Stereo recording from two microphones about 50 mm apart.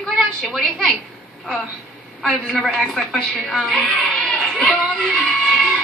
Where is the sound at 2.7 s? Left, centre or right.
Centre.